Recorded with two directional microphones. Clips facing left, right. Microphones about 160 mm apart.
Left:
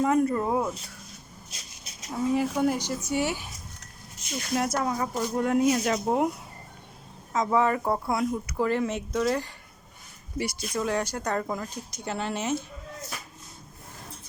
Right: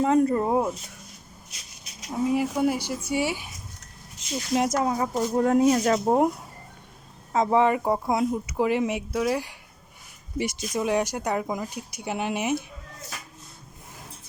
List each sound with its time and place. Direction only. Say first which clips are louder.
0.0 s speech: right 3 dB; 30° right (ahead or behind)
2.3 s speech: even; 10° right (ahead or behind)
4.5 s speech: right 3 dB; 20° right (ahead or behind); by 6.3 s 45° right (ahead or behind)
7.3 s speech: right 3 dB; 25° right (ahead or behind)
7.8 s speech: right 3 dB; 15° right (ahead or behind)